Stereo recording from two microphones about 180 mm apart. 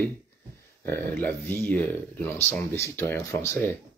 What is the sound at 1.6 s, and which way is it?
Speech, 10° left (ahead or behind).